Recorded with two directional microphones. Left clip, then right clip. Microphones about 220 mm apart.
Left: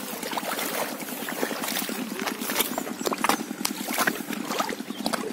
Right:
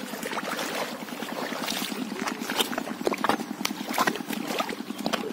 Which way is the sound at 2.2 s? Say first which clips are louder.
Right 1 dB; 15° left (ahead or behind).